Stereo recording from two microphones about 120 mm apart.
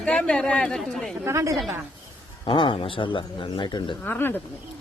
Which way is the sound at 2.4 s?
45° left (ahead or behind).